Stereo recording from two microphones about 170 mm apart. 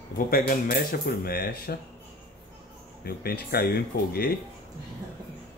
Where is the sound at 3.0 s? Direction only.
65° left (ahead or behind).